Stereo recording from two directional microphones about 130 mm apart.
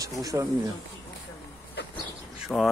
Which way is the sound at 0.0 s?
25° right (ahead or behind).